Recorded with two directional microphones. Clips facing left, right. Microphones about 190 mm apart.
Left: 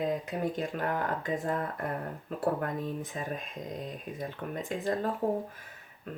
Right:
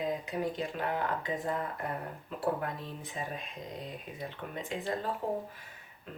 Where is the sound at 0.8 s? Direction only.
45° left (ahead or behind).